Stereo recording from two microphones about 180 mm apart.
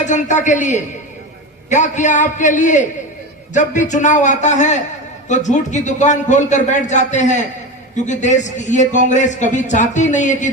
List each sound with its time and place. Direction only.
0.0 s a man's voice: 40° left (ahead or behind)